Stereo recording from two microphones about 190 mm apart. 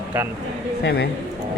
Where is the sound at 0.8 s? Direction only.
60° left (ahead or behind).